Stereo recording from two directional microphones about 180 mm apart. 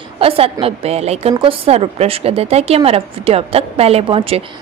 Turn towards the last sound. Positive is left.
turn(degrees=-30)  # may be behind; listen again after turning